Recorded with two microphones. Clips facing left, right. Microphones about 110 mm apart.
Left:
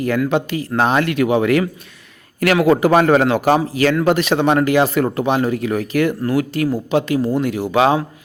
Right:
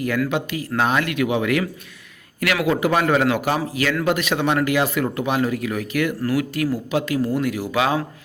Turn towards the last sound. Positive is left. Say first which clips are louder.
# left 6 dB
turn(degrees=30)  # may be behind; listen again after turning